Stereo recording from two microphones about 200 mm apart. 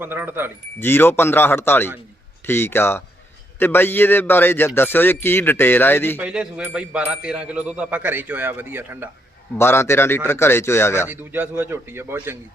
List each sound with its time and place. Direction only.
0.0 s speech: 10° right (ahead or behind)
0.8 s a man's voice: 10° left (ahead or behind)
6.1 s speech: 5° right (ahead or behind)
9.6 s a man's voice: 10° left (ahead or behind)
11.1 s speech: 10° right (ahead or behind)